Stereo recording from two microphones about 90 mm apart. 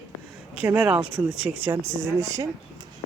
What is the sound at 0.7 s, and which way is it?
Speech, 15° right (ahead or behind).